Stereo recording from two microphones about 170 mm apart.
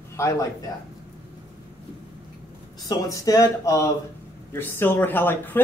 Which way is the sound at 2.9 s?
20° left (ahead or behind).